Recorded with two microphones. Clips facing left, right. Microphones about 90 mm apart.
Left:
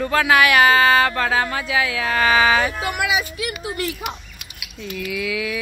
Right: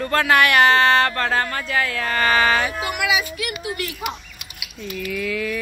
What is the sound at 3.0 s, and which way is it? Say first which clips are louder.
Speech: even; 30° left (ahead or behind).